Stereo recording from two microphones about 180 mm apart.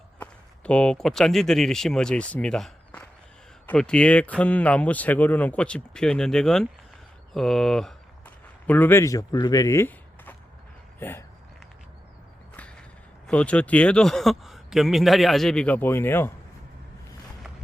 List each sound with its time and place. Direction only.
0.2 s speech: 5° left (ahead or behind)
13.2 s speech: 5° left (ahead or behind)